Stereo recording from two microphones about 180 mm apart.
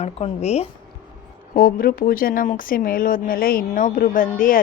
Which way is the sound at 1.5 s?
55° left (ahead or behind).